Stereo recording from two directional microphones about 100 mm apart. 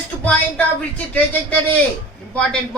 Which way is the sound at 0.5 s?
15° left (ahead or behind).